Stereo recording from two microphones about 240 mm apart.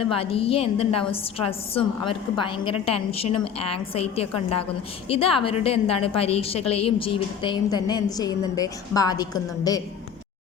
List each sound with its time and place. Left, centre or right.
0.0 s a woman's voice: left
3.3 s a woman's voice: left
3.9 s a woman's voice: left